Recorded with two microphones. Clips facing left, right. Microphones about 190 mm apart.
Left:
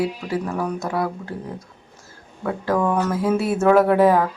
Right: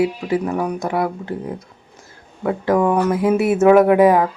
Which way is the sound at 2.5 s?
20° right (ahead or behind).